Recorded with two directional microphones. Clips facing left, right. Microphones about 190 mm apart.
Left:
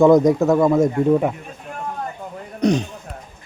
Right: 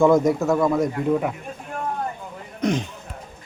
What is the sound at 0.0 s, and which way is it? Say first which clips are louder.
Speech: left 4 dB; 20° left (ahead or behind).